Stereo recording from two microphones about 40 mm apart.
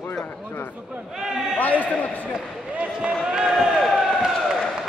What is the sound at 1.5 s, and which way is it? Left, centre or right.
Speech, left.